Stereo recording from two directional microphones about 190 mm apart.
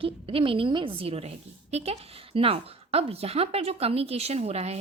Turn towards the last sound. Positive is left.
turn(degrees=-35)  # may be behind; listen again after turning